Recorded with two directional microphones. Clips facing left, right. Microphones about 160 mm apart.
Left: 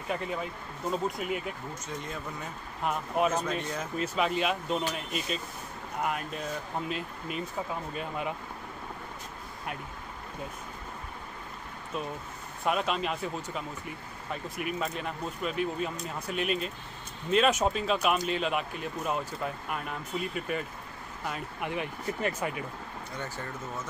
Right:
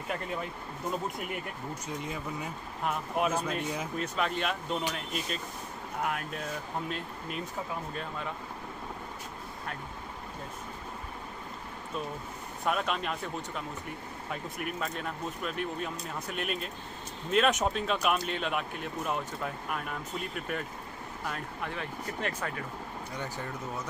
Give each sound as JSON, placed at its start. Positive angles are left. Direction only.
{"t": 0.1, "sound": "speech", "side_deg": 0}
{"t": 4.0, "sound": "speech", "side_deg": 5}
{"t": 12.6, "sound": "speech", "side_deg": 0}
{"t": 21.3, "sound": "speech", "side_deg": 10}
{"t": 23.1, "sound": "speech", "side_deg": -15}